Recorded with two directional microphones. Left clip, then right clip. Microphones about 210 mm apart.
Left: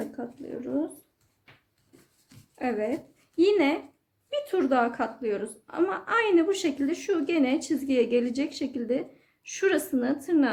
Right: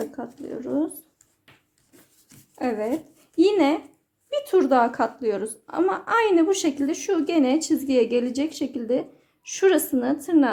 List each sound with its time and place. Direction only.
0.2 s a woman's voice: 25° right (ahead or behind)
2.6 s a woman's voice: 30° right (ahead or behind)